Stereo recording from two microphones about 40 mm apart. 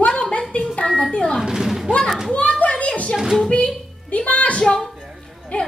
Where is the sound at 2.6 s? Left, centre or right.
Left.